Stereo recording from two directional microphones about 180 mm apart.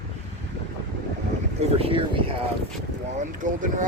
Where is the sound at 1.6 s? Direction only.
30° right (ahead or behind).